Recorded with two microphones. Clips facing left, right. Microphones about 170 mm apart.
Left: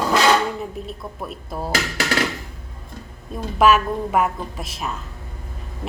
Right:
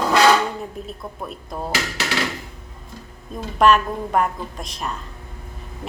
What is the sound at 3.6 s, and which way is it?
A woman's voice, 5° left (ahead or behind).